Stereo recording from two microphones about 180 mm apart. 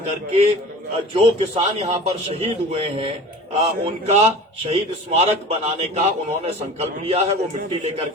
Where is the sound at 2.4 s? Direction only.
30° right (ahead or behind).